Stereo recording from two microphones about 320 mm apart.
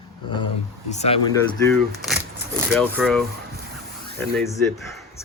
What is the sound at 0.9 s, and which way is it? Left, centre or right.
Speech, centre.